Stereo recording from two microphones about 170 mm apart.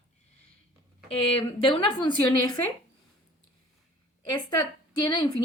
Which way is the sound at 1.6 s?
30° left (ahead or behind).